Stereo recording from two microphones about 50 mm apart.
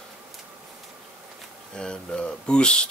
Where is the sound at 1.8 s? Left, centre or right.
Centre.